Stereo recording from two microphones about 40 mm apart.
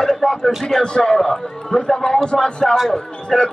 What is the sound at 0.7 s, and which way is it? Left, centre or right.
A man's voice, centre.